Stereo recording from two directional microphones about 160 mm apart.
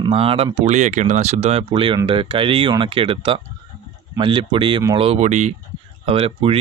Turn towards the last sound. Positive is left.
turn(degrees=-35)  # may be behind; listen again after turning